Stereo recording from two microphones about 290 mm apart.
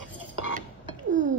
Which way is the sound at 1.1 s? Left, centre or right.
Right.